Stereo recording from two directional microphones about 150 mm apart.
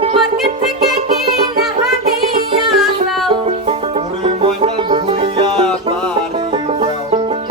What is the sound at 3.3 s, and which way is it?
Music, 40° right (ahead or behind).